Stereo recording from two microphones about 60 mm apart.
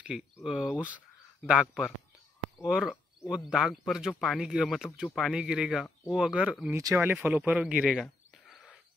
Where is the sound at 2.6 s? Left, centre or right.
Centre.